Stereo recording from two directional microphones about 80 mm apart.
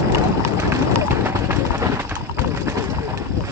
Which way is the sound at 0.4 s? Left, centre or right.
Right.